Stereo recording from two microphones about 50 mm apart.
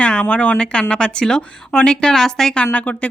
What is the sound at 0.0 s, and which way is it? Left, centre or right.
Speech, left.